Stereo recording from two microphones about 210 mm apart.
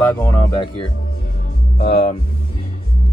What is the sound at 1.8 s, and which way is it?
Speech, 30° left (ahead or behind).